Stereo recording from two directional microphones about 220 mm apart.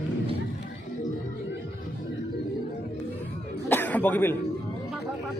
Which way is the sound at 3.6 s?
10° left (ahead or behind).